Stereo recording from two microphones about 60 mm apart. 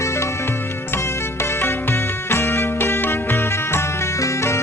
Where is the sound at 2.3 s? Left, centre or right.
Left.